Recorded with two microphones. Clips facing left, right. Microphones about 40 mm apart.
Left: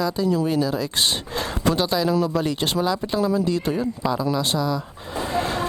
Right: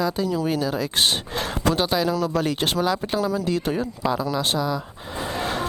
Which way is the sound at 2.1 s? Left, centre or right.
Centre.